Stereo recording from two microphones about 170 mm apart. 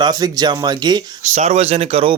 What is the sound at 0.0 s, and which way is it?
Speech, 25° right (ahead or behind).